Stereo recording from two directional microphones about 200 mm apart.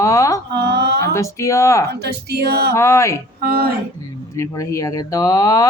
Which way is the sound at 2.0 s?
55° right (ahead or behind).